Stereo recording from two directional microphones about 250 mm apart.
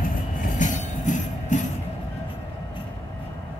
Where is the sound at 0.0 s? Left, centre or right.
Left.